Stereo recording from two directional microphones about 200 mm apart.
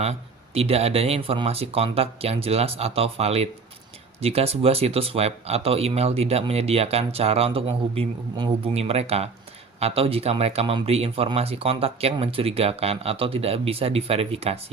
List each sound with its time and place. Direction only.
0.0 s speech: 30° right (ahead or behind)